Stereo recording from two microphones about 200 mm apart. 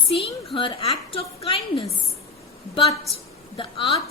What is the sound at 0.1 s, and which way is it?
A woman's voice, 30° left (ahead or behind).